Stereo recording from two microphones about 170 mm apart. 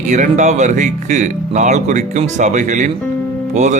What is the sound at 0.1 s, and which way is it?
Speech, 45° right (ahead or behind).